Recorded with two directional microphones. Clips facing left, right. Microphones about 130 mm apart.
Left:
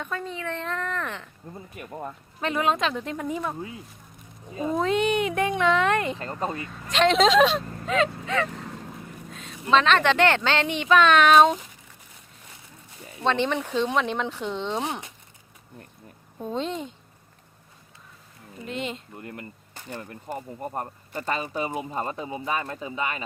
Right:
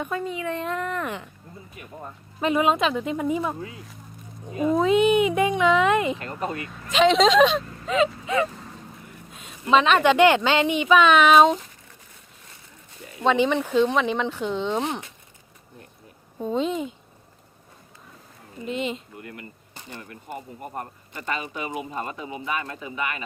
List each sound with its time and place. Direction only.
0.0 s a woman's voice: 15° right (ahead or behind)
2.4 s a woman's voice: 10° right (ahead or behind)
4.7 s speech: centre (ahead or behind)
6.1 s speech: 30° left (ahead or behind)
6.7 s a woman's voice: centre (ahead or behind)
13.2 s speech: 5° right (ahead or behind)
16.4 s speech: 5° right (ahead or behind)
18.6 s speech: centre (ahead or behind)
19.2 s speech: 30° left (ahead or behind)